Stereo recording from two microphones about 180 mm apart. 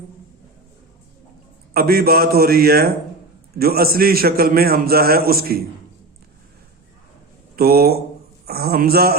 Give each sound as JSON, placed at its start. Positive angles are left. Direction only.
{"t": 1.7, "sound": "a man's voice", "side_deg": -55}
{"t": 7.5, "sound": "a man's voice", "side_deg": -60}